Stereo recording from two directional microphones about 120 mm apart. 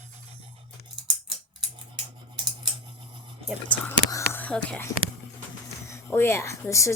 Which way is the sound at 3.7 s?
20° left (ahead or behind).